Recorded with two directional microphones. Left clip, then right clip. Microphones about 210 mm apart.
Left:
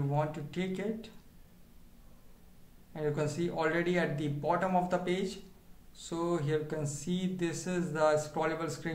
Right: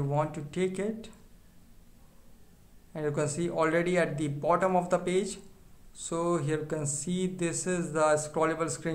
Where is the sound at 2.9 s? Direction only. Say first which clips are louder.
Right 3 dB; 30° right (ahead or behind).